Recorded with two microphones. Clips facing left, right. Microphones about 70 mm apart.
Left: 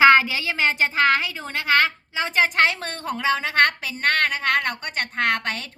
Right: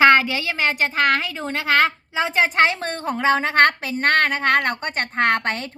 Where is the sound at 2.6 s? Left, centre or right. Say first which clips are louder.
Right 2 dB; right.